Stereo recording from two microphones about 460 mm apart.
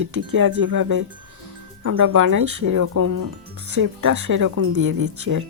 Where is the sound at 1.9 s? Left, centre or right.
Right.